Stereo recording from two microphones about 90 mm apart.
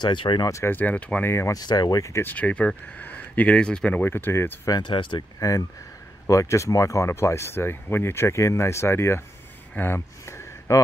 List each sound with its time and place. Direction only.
0.0 s speech: 65° left (ahead or behind)
0.5 s speech: 30° left (ahead or behind)
0.7 s speech: 20° left (ahead or behind)
1.2 s speech: 30° left (ahead or behind)
1.6 s speech: 50° left (ahead or behind)
2.2 s speech: 15° left (ahead or behind)
4.0 s speech: 25° left (ahead or behind)
4.6 s speech: 50° left (ahead or behind)
4.9 s speech: 65° left (ahead or behind)
5.4 s speech: 40° left (ahead or behind)